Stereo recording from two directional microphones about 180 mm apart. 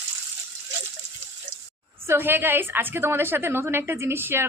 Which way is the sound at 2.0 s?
10° right (ahead or behind).